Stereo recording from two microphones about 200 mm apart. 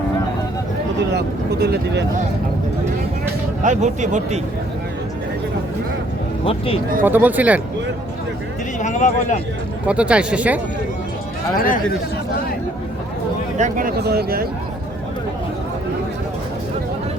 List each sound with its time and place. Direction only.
1.1 s speech: 55° right (ahead or behind)
3.6 s speech: 35° right (ahead or behind)
6.4 s speech: 25° left (ahead or behind)
7.0 s speech: 10° right (ahead or behind)
8.8 s a sound: 40° left (ahead or behind)
9.8 s speech: 5° right (ahead or behind)
11.5 s speech: 45° left (ahead or behind)
13.6 s speech: 40° right (ahead or behind)